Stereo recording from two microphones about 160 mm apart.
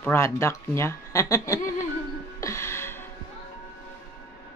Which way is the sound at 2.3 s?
20° left (ahead or behind).